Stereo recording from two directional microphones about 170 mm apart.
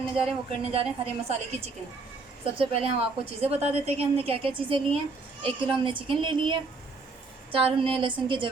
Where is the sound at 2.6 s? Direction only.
35° right (ahead or behind).